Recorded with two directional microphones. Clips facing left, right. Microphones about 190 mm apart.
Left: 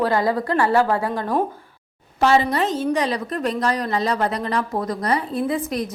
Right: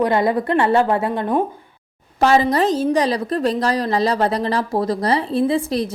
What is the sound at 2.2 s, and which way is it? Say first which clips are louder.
A woman's voice: right 3 dB; 40° right (ahead or behind).